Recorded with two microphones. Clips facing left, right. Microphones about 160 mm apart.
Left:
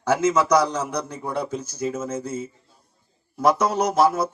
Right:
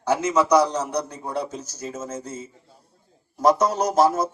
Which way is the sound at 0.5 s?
35° right (ahead or behind).